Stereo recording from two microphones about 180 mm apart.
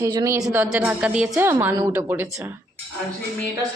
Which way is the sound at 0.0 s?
20° right (ahead or behind).